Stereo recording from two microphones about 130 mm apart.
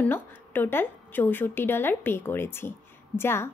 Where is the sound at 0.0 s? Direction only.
15° left (ahead or behind).